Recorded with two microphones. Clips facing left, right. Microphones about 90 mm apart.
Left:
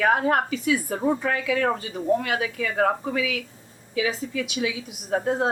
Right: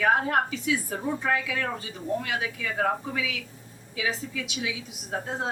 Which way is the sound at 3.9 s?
65° left (ahead or behind).